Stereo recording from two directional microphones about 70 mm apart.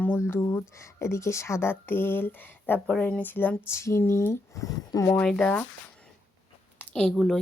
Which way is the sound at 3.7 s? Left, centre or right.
Left.